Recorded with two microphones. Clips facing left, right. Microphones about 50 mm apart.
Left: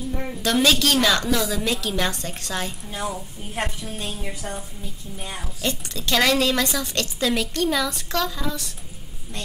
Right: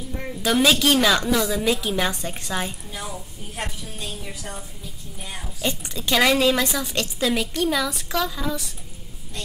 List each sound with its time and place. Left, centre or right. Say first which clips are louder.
0.4 s a woman's voice: right 1 dB; centre
3.5 s a woman's voice: left 4 dB; left
5.6 s a woman's voice: right 1 dB; centre